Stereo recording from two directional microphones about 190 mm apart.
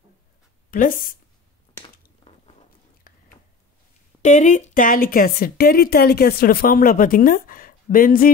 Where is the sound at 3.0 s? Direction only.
50° left (ahead or behind).